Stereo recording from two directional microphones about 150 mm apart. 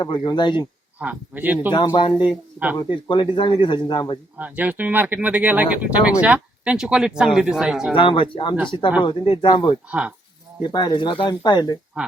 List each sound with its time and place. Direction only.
0.0 s speech: 30° left (ahead or behind)
0.9 s speech: 10° right (ahead or behind)
1.7 s speech: 30° left (ahead or behind)
4.4 s speech: 10° right (ahead or behind)
7.9 s speech: 35° left (ahead or behind)